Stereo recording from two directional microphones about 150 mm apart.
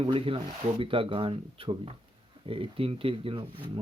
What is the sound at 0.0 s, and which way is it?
Speech, 35° right (ahead or behind).